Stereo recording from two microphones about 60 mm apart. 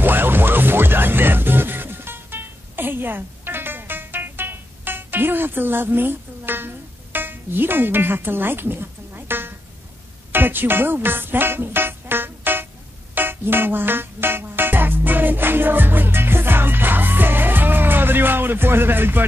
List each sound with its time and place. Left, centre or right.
0.0 s music: right